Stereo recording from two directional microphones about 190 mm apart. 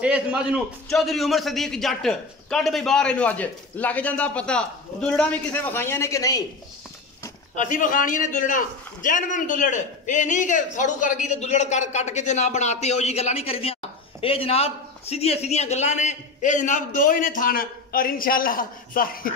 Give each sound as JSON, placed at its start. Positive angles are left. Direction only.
{"t": 0.0, "sound": "a man's voice", "side_deg": -5}
{"t": 7.5, "sound": "a man's voice", "side_deg": 40}